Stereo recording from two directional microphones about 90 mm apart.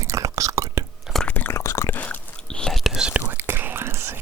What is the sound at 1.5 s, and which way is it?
Whispering, 35° left (ahead or behind).